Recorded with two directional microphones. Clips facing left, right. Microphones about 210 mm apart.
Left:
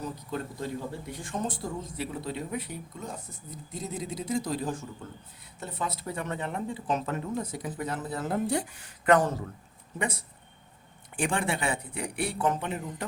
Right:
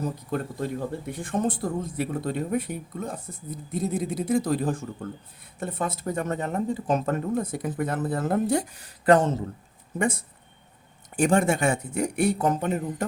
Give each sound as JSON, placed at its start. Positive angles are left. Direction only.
{"t": 0.0, "sound": "speech", "side_deg": -55}
{"t": 11.2, "sound": "speech", "side_deg": -45}